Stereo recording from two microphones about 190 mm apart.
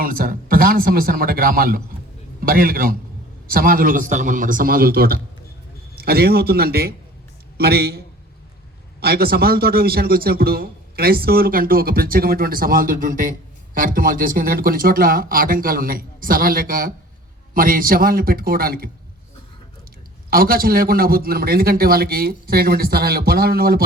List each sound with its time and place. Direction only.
0.0 s a man's voice: 50° right (ahead or behind)
20.3 s a man's voice: 50° right (ahead or behind)